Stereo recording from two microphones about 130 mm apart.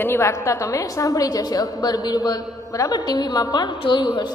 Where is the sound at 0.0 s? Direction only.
20° left (ahead or behind).